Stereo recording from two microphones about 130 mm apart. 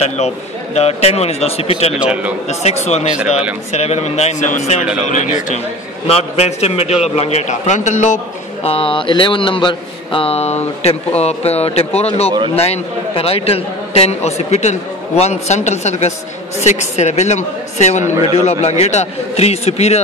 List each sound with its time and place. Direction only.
0.7 s speech: 55° left (ahead or behind)
2.0 s a man's voice: 10° right (ahead or behind)
2.6 s a man's voice: 60° left (ahead or behind)
6.0 s a man's voice: 50° left (ahead or behind); by 8.2 s 70° left (ahead or behind)
8.6 s a man's voice: 45° left (ahead or behind)